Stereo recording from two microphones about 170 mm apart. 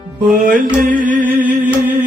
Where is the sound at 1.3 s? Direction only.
10° right (ahead or behind).